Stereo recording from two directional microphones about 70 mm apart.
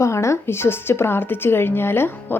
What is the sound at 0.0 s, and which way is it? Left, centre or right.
A woman's voice, left.